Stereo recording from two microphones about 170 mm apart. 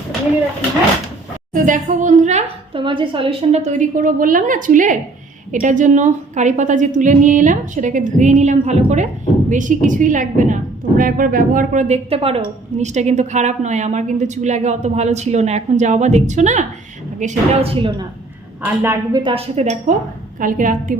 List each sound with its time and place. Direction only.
1.5 s a woman's voice: 50° right (ahead or behind)
2.7 s a woman's voice: 30° right (ahead or behind)
18.6 s a woman's voice: 15° right (ahead or behind)
19.2 s a woman's voice: 35° right (ahead or behind)
20.4 s a woman's voice: 50° right (ahead or behind)